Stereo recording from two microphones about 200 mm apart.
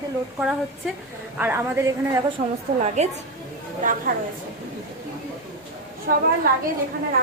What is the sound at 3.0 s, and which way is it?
Speech, 35° right (ahead or behind).